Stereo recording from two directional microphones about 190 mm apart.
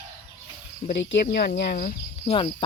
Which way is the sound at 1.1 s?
55° left (ahead or behind).